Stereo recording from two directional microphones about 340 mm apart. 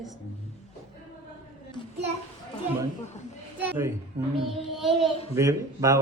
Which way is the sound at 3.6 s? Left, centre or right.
Centre.